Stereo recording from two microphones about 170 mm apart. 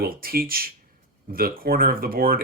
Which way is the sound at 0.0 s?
60° right (ahead or behind).